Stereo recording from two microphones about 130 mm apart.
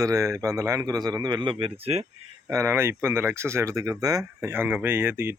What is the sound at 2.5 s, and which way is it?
Speech, 20° right (ahead or behind).